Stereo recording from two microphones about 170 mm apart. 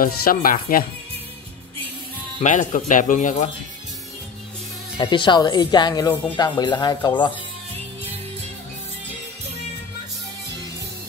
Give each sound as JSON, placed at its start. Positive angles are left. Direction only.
{"t": 0.0, "sound": "speech", "side_deg": 55}
{"t": 2.4, "sound": "speech", "side_deg": 45}
{"t": 4.9, "sound": "speech", "side_deg": 30}